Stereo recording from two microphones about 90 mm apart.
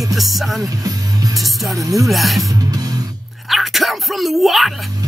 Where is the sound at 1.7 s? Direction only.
40° right (ahead or behind).